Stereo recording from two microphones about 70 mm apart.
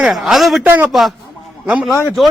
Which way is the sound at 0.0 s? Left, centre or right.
Centre.